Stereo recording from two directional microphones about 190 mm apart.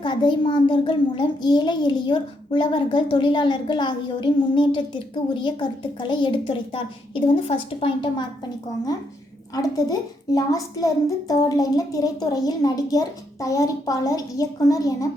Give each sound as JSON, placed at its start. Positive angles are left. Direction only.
{"t": 0.0, "sound": "a child's voice", "side_deg": 25}
{"t": 9.6, "sound": "a child's voice", "side_deg": 20}